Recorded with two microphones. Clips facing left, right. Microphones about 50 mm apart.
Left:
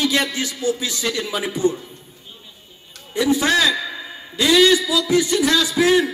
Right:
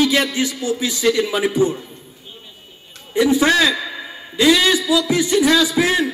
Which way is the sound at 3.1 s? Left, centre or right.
Right.